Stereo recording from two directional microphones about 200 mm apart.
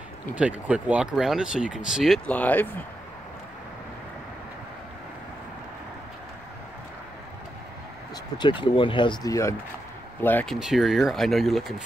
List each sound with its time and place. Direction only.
0.4 s speech: 5° right (ahead or behind)
8.4 s speech: 25° left (ahead or behind); by 11.7 s centre (ahead or behind)